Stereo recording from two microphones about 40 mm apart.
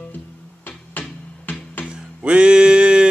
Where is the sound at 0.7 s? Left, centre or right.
Left.